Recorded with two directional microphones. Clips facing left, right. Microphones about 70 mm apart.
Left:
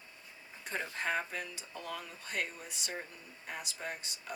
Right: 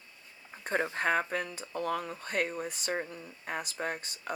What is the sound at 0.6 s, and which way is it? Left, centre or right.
Speech, right.